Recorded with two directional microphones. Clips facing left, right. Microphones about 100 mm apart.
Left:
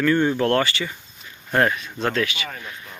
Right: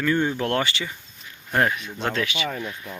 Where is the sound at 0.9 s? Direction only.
Centre (ahead or behind).